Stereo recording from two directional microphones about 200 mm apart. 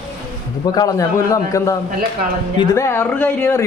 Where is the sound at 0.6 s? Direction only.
20° left (ahead or behind).